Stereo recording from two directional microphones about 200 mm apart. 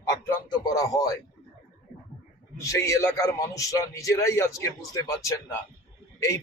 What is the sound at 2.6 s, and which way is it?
A man's voice, 15° left (ahead or behind).